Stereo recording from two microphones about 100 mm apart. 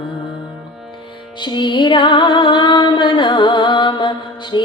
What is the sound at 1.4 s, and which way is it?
Music, 50° left (ahead or behind).